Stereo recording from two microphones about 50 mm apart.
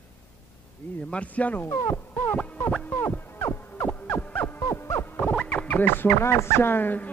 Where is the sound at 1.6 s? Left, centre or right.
Left.